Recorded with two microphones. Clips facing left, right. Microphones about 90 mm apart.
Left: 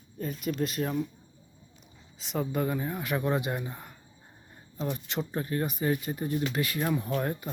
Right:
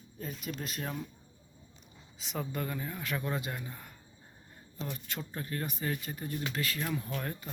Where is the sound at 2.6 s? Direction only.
20° left (ahead or behind).